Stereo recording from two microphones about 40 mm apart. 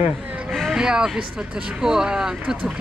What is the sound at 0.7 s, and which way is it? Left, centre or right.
Speech, centre.